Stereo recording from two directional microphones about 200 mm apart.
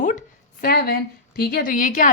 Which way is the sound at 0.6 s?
50° left (ahead or behind).